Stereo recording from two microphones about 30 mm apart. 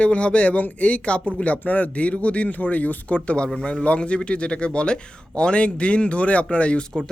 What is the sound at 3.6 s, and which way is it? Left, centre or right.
Speech, left.